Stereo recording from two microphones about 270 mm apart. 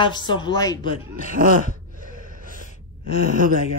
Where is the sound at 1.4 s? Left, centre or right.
Right.